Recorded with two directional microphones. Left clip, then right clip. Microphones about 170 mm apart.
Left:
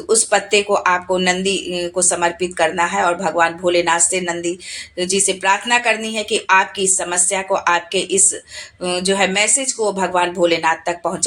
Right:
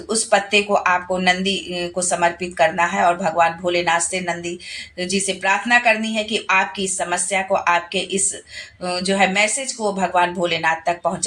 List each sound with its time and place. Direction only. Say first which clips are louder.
0.1 s speech: left 2 dB; 45° left (ahead or behind)